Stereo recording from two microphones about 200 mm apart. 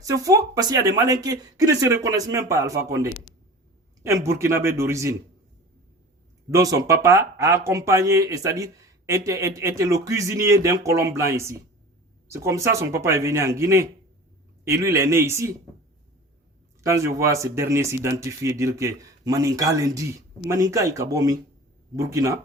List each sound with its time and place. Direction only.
0.0 s speech: 15° right (ahead or behind)
6.5 s speech: 15° right (ahead or behind)
16.8 s speech: 15° right (ahead or behind)